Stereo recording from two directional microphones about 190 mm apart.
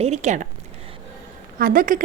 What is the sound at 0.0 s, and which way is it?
Speech, 35° right (ahead or behind).